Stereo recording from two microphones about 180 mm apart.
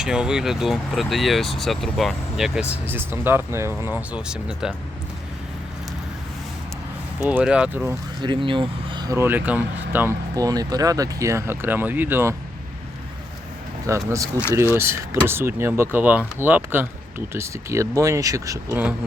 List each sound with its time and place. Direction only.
0.0 s speech: 5° right (ahead or behind)
7.2 s speech: 5° right (ahead or behind)
8.2 s speech: 25° right (ahead or behind)
13.8 s speech: 15° right (ahead or behind)